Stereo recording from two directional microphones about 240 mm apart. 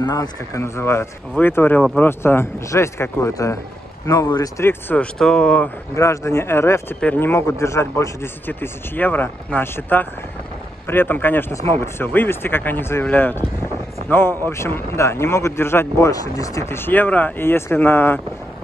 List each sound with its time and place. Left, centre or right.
0.0 s speech: centre